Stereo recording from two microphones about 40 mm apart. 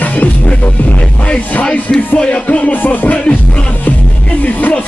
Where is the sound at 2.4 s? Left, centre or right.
Left.